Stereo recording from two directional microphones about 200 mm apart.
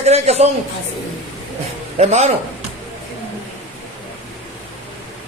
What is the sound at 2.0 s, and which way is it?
Speech, 30° right (ahead or behind).